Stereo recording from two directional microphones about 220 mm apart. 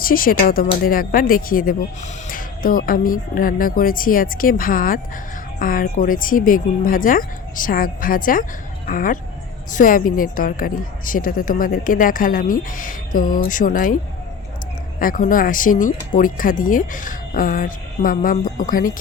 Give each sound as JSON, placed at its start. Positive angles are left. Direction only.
{"t": 0.0, "sound": "speech", "side_deg": 40}